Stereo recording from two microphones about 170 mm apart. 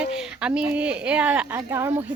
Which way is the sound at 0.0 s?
5° right (ahead or behind).